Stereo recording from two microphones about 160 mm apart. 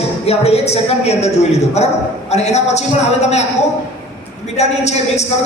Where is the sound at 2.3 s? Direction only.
45° left (ahead or behind).